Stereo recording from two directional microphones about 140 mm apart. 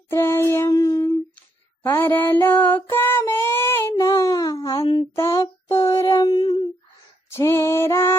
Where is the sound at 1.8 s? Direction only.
15° left (ahead or behind).